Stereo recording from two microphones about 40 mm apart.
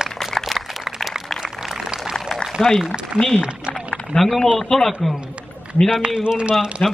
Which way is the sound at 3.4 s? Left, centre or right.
Right.